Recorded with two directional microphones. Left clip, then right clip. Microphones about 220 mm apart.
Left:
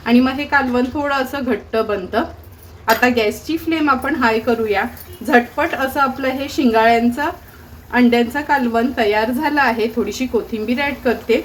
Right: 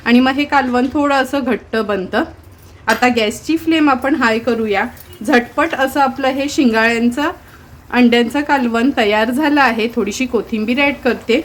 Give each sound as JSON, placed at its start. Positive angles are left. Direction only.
{"t": 0.0, "sound": "a woman's voice", "side_deg": -35}